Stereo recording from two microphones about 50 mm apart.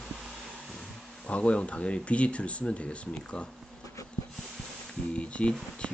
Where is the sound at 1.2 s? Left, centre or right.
Left.